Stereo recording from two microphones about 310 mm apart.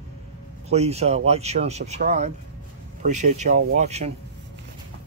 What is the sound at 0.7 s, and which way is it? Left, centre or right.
Speech, right.